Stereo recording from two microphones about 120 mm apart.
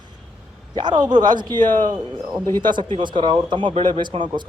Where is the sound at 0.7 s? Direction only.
40° right (ahead or behind).